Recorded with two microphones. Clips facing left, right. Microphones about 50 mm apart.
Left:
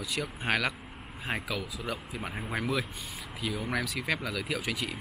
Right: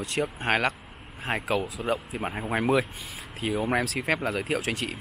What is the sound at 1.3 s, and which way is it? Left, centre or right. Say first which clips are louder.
Speech: right 7 dB; right.